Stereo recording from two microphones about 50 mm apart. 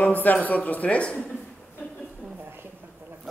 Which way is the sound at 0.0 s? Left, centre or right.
Left.